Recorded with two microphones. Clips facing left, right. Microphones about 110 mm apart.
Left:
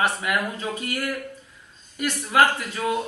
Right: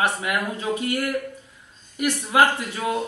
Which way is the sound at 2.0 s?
15° right (ahead or behind).